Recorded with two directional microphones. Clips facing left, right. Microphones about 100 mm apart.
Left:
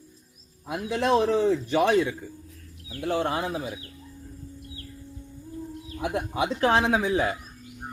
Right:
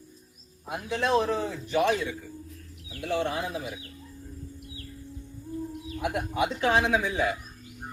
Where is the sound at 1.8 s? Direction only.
55° left (ahead or behind).